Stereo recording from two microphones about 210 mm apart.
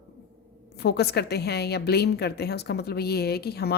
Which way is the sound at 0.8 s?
50° left (ahead or behind).